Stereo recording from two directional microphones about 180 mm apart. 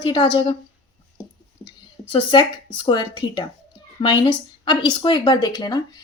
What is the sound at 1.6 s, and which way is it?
A woman's voice, 25° left (ahead or behind).